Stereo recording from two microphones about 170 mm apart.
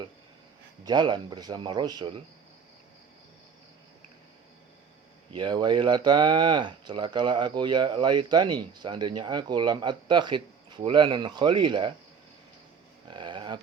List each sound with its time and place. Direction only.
0.9 s speech: 25° right (ahead or behind)
5.3 s speech: 25° right (ahead or behind)
13.1 s a sound: 25° right (ahead or behind)